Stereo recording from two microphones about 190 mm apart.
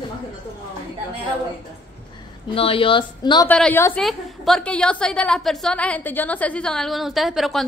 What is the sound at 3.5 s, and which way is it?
A woman's voice, 10° left (ahead or behind).